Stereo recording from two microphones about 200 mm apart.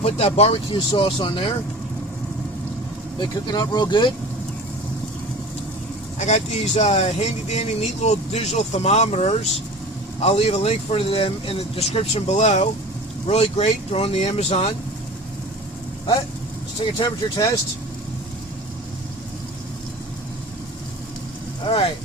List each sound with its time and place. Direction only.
0.0 s speech: 30° left (ahead or behind)
3.2 s speech: 20° left (ahead or behind)
6.1 s speech: 35° left (ahead or behind)
17.0 s speech: 15° left (ahead or behind)